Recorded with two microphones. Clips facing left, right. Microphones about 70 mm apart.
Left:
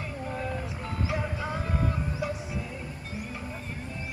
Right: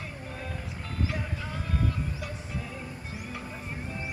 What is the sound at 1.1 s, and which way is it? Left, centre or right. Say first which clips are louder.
Music: left 4 dB; centre.